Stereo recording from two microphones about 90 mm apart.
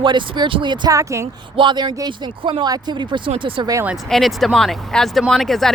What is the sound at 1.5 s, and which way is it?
Speech, 55° right (ahead or behind).